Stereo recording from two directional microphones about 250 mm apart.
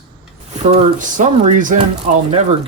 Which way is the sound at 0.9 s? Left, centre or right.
Right.